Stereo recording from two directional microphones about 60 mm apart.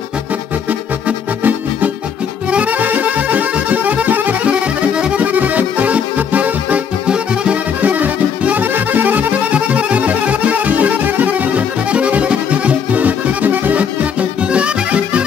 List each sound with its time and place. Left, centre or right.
0.7 s music: right